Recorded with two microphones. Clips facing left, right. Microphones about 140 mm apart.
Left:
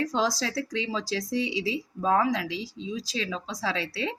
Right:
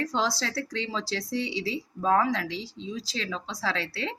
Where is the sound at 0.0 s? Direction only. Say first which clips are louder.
Left 2 dB; 15° left (ahead or behind).